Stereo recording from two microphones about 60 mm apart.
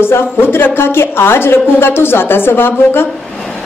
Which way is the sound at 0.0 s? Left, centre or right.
Left.